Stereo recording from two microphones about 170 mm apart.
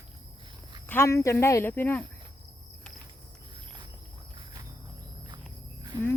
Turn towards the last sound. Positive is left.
turn(degrees=-20)  # may be behind; listen again after turning